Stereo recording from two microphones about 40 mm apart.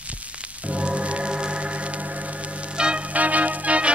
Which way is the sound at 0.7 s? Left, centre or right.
Right.